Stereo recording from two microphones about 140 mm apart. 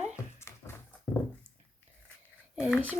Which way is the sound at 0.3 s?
20° left (ahead or behind).